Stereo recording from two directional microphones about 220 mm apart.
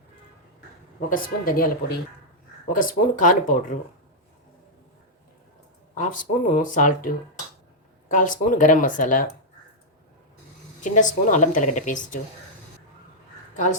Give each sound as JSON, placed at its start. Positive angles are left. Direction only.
{"t": 1.1, "sound": "speech", "side_deg": 40}
{"t": 2.6, "sound": "speech", "side_deg": 40}
{"t": 6.0, "sound": "speech", "side_deg": 35}
{"t": 10.8, "sound": "speech", "side_deg": 35}